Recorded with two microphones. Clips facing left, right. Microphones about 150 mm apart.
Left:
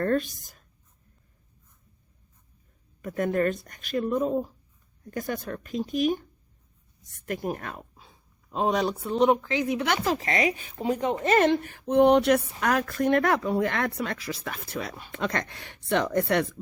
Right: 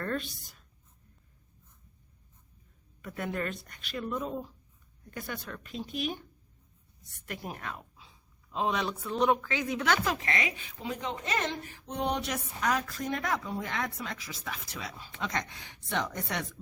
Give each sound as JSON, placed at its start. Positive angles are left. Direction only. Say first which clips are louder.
{"t": 0.0, "sound": "speech", "louder": "left 9 dB", "side_deg": 45}
{"t": 3.0, "sound": "speech", "louder": "left 9 dB", "side_deg": 45}
{"t": 7.3, "sound": "speech", "louder": "left 8 dB", "side_deg": 45}
{"t": 9.6, "sound": "speech", "louder": "left 3 dB", "side_deg": 15}
{"t": 10.0, "sound": "speech", "louder": "left 6 dB", "side_deg": 30}